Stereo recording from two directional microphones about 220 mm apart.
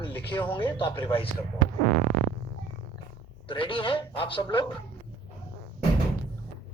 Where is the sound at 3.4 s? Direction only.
25° left (ahead or behind).